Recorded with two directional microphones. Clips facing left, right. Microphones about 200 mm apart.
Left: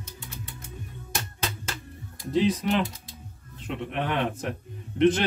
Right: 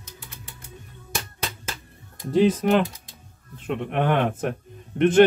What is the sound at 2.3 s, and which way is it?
Speech, 50° right (ahead or behind).